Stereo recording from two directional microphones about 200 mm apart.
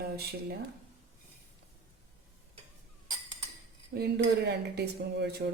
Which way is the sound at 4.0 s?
55° right (ahead or behind).